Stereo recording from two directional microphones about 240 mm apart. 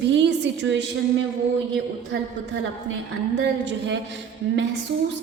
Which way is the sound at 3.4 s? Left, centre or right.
Right.